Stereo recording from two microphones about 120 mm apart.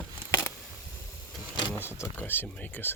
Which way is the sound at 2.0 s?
20° left (ahead or behind).